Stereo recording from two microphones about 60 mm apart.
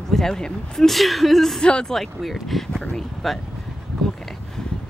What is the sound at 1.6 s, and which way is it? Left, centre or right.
Speech, centre.